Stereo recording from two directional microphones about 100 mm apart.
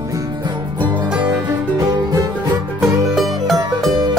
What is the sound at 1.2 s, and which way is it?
Music, 40° right (ahead or behind).